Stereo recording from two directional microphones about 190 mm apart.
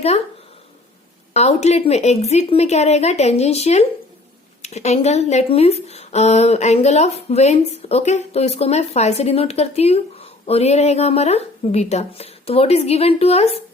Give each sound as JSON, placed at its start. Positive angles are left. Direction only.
{"t": 1.3, "sound": "speech", "side_deg": 35}